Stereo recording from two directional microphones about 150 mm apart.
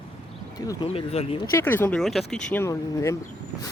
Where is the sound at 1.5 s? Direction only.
15° left (ahead or behind).